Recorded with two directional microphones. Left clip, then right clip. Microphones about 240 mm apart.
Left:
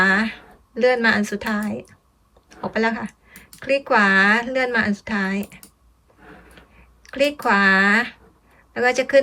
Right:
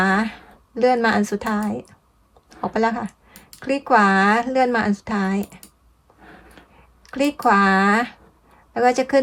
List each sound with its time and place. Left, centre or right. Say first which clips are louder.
0.0 s speech: left 2 dB; centre
7.0 s speech: even; centre